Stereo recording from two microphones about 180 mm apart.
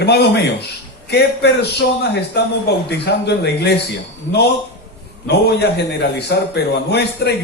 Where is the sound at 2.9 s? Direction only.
70° left (ahead or behind).